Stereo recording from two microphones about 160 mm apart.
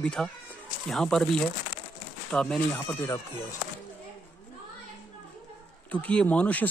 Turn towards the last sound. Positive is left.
turn(degrees=10)  # may be behind; listen again after turning